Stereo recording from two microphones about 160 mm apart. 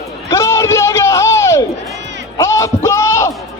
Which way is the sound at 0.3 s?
20° left (ahead or behind).